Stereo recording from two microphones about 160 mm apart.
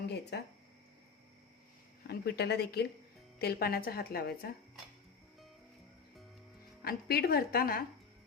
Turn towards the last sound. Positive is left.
turn(degrees=70)  # may be behind; listen again after turning